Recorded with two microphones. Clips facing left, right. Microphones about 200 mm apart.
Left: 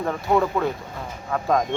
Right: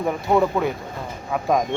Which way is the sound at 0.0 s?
10° right (ahead or behind).